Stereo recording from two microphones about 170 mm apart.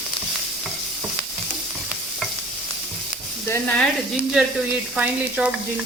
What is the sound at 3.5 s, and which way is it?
Speech, 10° left (ahead or behind).